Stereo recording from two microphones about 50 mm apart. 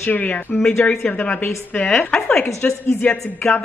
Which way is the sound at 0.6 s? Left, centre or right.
Centre.